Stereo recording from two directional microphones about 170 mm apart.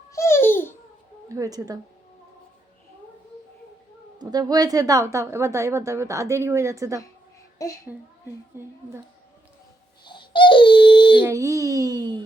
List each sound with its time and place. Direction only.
0.1 s babbling: 15° left (ahead or behind)
1.3 s a child's voice: 20° right (ahead or behind)
4.2 s a woman's voice: 20° right (ahead or behind)
7.6 s a woman's voice: 20° left (ahead or behind)
8.5 s a woman's voice: 15° right (ahead or behind)
10.0 s baby cry: 30° left (ahead or behind)
11.2 s a child's voice: 15° right (ahead or behind)